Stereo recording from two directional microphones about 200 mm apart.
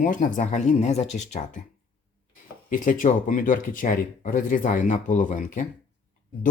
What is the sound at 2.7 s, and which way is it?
Speech, 40° left (ahead or behind).